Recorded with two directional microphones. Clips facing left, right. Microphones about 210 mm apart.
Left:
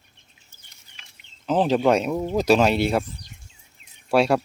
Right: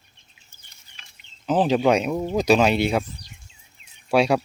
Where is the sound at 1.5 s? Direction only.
Centre (ahead or behind).